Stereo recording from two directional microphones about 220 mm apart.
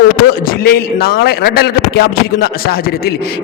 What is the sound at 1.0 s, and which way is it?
Speech, 45° left (ahead or behind).